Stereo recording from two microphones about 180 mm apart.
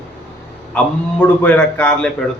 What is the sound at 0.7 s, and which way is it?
A man's voice, 5° left (ahead or behind).